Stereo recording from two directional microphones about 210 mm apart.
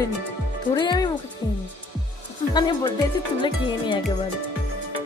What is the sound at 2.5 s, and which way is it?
Speech, 20° left (ahead or behind).